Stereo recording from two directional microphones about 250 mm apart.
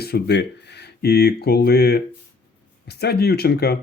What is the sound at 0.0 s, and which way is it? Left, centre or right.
Speech, left.